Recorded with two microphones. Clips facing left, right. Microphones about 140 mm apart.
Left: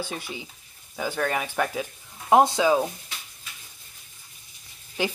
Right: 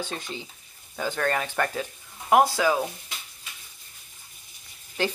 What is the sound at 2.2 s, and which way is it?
Speech, 20° left (ahead or behind).